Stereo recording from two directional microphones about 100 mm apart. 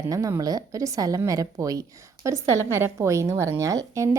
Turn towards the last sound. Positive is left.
turn(degrees=-35)  # may be behind; listen again after turning